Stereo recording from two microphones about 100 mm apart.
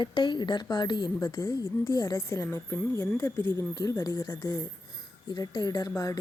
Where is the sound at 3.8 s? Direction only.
35° left (ahead or behind).